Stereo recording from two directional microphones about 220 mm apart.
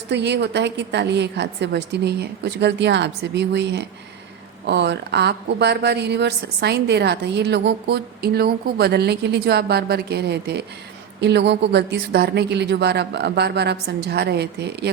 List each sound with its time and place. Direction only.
0.1 s a woman's voice: 50° right (ahead or behind)